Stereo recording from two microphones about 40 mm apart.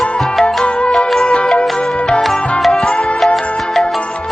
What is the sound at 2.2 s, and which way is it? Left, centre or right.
Music, centre.